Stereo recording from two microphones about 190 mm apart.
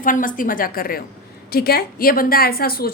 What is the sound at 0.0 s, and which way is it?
A woman's voice, 45° left (ahead or behind).